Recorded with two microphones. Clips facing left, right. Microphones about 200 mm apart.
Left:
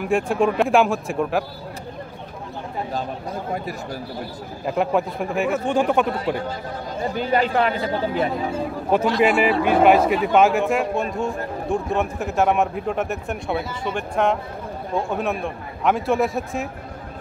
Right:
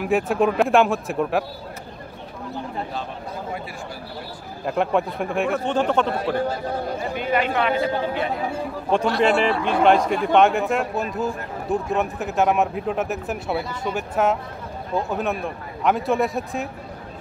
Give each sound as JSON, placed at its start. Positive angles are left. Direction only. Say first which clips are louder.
{"t": 0.0, "sound": "speech", "louder": "even", "side_deg": -5}
{"t": 4.6, "sound": "speech", "louder": "even", "side_deg": 0}
{"t": 7.2, "sound": "speech", "louder": "left 3 dB", "side_deg": 35}
{"t": 8.9, "sound": "speech", "louder": "left 1 dB", "side_deg": 5}